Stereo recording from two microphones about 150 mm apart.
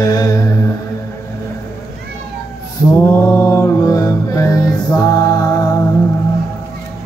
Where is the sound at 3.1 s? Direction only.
20° left (ahead or behind).